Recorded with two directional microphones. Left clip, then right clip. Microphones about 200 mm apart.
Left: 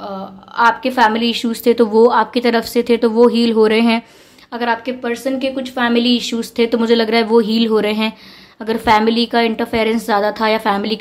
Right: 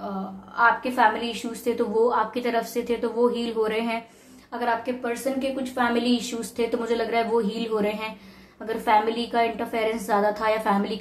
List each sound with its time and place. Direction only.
0.6 s a woman's voice: 50° left (ahead or behind)